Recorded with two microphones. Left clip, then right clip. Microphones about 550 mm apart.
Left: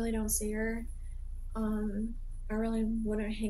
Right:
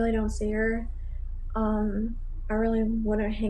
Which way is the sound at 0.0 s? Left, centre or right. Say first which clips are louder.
Right 8 dB; left.